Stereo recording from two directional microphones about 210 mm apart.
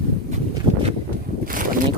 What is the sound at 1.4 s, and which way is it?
Boat, 40° right (ahead or behind).